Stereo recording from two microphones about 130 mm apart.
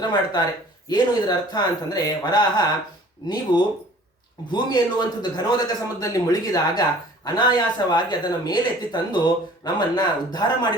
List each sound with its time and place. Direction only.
0.0 s speech: 35° left (ahead or behind)